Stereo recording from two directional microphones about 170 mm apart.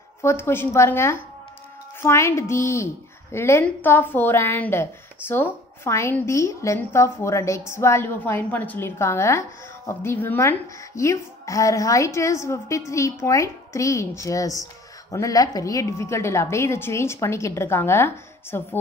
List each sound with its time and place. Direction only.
0.2 s a woman's voice: 15° left (ahead or behind)
5.9 s a woman's voice: 15° left (ahead or behind)